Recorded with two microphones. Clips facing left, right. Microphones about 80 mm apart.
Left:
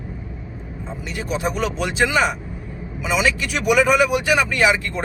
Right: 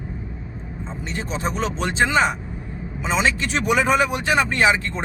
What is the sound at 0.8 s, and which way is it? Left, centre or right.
Vehicle, right.